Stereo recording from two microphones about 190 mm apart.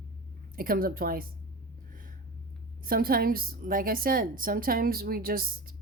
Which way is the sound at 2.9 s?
50° right (ahead or behind).